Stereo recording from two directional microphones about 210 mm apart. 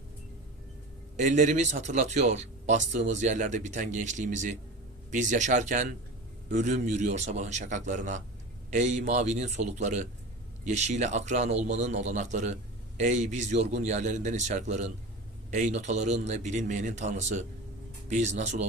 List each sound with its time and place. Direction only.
1.1 s speech: 35° right (ahead or behind)